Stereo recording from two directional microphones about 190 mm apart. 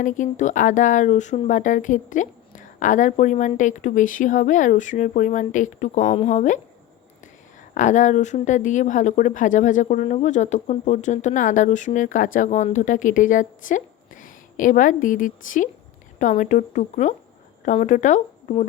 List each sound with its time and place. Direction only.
0.0 s speech: 40° left (ahead or behind)
7.7 s a woman's voice: 40° left (ahead or behind)